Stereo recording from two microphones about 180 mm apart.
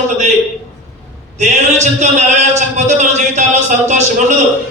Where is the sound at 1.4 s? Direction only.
40° right (ahead or behind).